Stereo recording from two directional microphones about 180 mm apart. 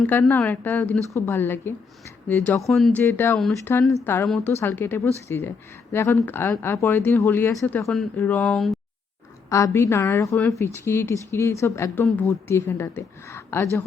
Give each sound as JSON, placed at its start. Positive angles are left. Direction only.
{"t": 0.0, "sound": "speech", "side_deg": 10}
{"t": 3.0, "sound": "speech", "side_deg": 10}
{"t": 9.7, "sound": "speech", "side_deg": 15}
{"t": 10.3, "sound": "speech", "side_deg": 0}
{"t": 10.6, "sound": "speech", "side_deg": 15}